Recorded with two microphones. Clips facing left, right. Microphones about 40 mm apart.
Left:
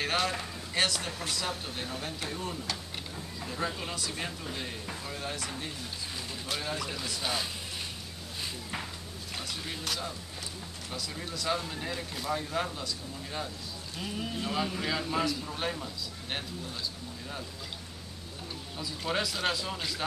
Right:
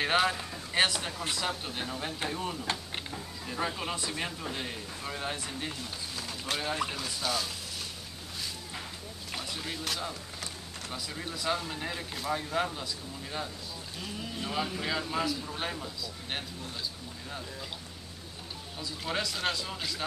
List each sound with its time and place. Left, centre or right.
0.0 s speech: centre
3.4 s speech: centre
6.7 s speech: right
7.0 s speech: centre
9.3 s a man's voice: centre
18.8 s a man's voice: centre